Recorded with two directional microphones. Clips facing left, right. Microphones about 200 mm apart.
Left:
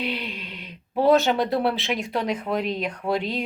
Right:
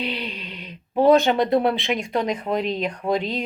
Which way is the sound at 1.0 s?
Centre (ahead or behind).